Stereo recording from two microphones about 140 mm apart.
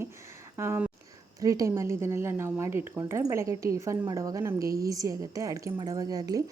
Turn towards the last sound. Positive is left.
turn(degrees=-25)  # may be behind; listen again after turning